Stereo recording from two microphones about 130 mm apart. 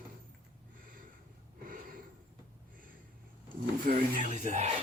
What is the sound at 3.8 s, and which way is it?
Music, 85° right.